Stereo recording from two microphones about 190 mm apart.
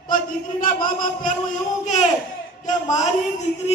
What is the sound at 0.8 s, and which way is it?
Speech, 45° left (ahead or behind).